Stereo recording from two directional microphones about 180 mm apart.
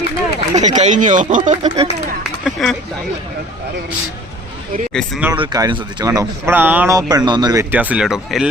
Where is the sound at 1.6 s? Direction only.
30° right (ahead or behind).